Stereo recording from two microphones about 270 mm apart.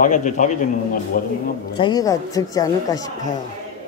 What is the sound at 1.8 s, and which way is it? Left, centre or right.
A woman's voice, centre.